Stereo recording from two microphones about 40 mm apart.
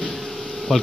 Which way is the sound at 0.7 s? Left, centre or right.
Centre.